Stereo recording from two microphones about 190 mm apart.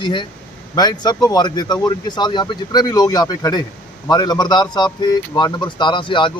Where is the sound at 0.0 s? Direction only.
25° left (ahead or behind).